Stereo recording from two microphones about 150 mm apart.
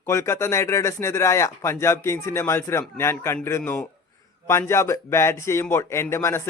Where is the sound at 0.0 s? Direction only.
15° left (ahead or behind).